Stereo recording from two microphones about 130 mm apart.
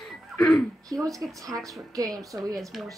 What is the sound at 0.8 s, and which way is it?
A woman's voice, 25° right (ahead or behind).